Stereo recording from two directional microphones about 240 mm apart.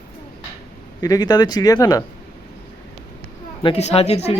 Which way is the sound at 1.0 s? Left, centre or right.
Centre.